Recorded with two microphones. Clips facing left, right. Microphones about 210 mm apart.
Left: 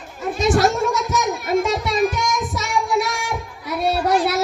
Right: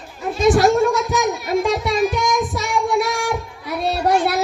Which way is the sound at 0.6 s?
Centre (ahead or behind).